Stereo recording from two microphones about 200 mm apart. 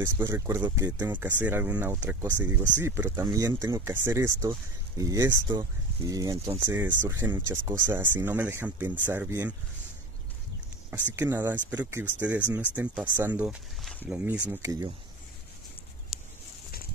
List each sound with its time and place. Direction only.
0.0 s speech: 15° right (ahead or behind)
1.2 s speech: 10° right (ahead or behind); by 6.7 s 25° right (ahead or behind)
6.7 s speech: 10° right (ahead or behind)
11.1 s speech: 10° right (ahead or behind)